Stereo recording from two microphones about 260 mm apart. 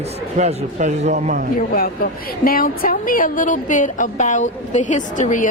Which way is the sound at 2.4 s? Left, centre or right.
Left.